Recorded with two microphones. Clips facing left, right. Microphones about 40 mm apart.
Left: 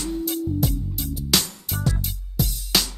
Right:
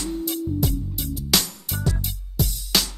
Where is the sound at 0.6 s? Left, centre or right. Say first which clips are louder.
Even; right.